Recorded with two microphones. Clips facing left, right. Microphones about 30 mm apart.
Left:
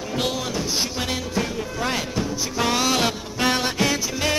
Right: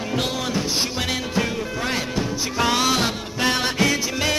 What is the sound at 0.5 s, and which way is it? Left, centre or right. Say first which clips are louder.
Music: right 2 dB; centre.